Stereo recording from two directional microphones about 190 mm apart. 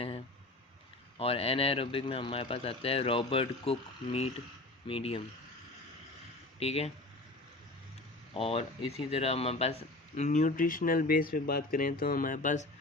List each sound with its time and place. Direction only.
1.2 s speech: 30° left (ahead or behind)
6.6 s speech: 35° left (ahead or behind)
8.3 s speech: 30° left (ahead or behind)